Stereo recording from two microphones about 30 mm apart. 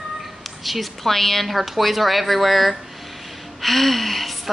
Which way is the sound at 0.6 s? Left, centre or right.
Centre.